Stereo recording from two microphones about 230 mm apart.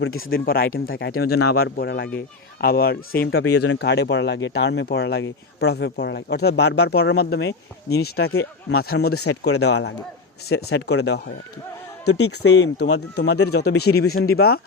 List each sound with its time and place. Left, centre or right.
0.3 s speech: left
9.1 s speech: left
10.5 s speech: left
12.2 s speech: left